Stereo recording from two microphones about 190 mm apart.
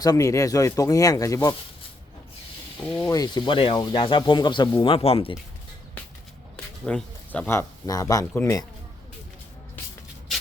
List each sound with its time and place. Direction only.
0.0 s speech: 20° left (ahead or behind)
2.8 s speech: 5° left (ahead or behind)
3.1 s speech: 20° left (ahead or behind)
6.8 s speech: 5° left (ahead or behind)